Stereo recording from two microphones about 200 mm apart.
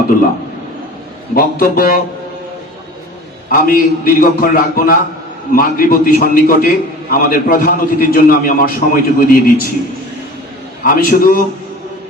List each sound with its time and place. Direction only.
1.4 s a man's voice: 45° left (ahead or behind)
3.5 s a man's voice: 45° left (ahead or behind)
10.8 s a man's voice: 45° left (ahead or behind)